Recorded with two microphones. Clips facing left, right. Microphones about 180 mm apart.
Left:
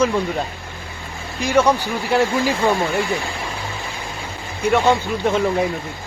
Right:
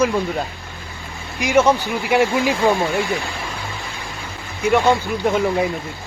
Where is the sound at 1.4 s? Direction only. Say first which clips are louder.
Right 1 dB; 15° right (ahead or behind).